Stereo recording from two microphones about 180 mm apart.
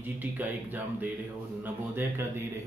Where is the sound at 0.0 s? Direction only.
10° right (ahead or behind).